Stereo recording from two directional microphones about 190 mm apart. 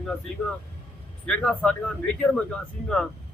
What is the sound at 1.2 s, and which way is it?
A man's voice, 5° left (ahead or behind).